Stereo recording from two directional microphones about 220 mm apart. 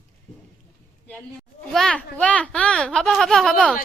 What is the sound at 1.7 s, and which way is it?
A child's voice, 5° left (ahead or behind).